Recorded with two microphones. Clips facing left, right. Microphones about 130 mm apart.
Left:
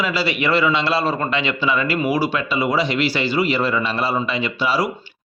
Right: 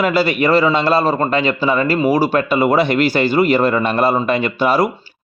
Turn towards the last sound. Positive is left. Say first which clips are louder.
# right 5 dB
turn(degrees=-50)  # may be behind; listen again after turning